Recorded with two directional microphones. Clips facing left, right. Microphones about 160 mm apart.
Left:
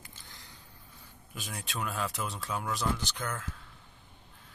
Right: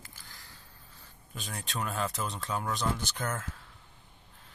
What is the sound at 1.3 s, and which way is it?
Speech, 5° left (ahead or behind).